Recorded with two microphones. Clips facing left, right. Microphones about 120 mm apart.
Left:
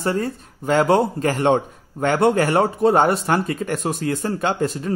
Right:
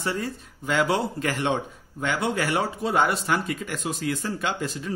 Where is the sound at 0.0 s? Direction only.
45° left (ahead or behind).